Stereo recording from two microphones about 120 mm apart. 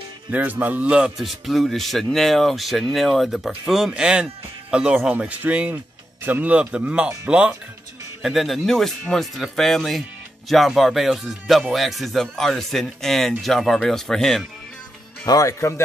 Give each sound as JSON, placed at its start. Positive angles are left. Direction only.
{"t": 0.3, "sound": "a man's voice", "side_deg": -15}
{"t": 15.2, "sound": "a man's voice", "side_deg": 30}